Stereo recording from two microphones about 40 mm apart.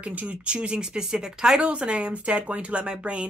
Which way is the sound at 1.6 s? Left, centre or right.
Right.